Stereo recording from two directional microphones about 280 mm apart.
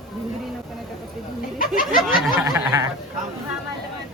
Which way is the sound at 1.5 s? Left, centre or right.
Left.